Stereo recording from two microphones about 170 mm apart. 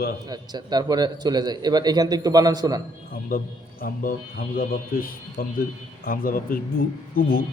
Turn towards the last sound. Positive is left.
turn(degrees=55)  # may be behind; listen again after turning